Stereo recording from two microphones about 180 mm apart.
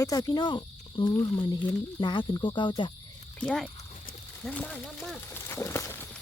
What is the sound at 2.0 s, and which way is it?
Speech, 25° left (ahead or behind).